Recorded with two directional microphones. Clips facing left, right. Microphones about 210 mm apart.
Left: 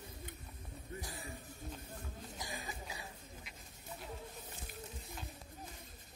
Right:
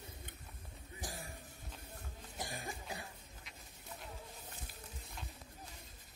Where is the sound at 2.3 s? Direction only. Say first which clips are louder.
Right 3 dB; 50° right (ahead or behind).